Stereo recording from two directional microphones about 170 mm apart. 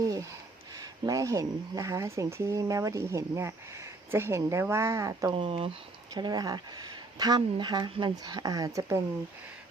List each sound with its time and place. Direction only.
0.8 s speech: 20° right (ahead or behind)
5.3 s speech: 30° right (ahead or behind)